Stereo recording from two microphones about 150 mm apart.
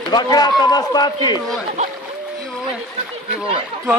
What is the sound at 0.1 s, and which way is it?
A man's voice, 25° left (ahead or behind).